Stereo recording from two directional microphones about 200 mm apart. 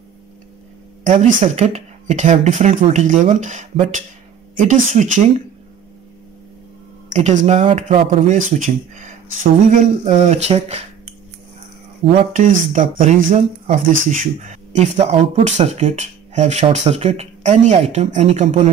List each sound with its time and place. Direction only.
1.0 s speech: 40° right (ahead or behind)
7.1 s speech: 35° right (ahead or behind)
12.2 s speech: 40° right (ahead or behind)